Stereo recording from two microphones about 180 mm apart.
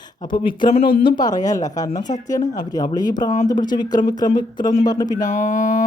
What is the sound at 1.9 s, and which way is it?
Speech, 45° left (ahead or behind).